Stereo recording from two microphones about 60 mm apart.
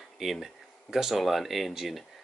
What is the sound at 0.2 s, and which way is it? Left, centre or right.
Speech, centre.